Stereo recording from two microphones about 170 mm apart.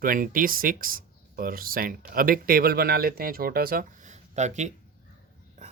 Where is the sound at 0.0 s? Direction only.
55° right (ahead or behind).